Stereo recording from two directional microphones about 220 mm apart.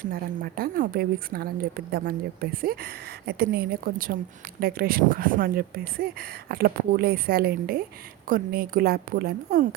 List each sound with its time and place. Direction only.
0.0 s speech: 40° right (ahead or behind)